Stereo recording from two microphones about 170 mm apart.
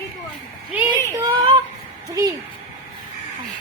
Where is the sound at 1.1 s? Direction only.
20° right (ahead or behind).